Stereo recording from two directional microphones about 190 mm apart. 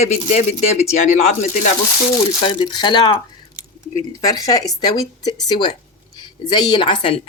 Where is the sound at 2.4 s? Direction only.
25° left (ahead or behind).